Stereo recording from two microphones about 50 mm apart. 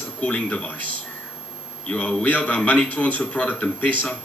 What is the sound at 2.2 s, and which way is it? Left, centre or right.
A man's voice, left.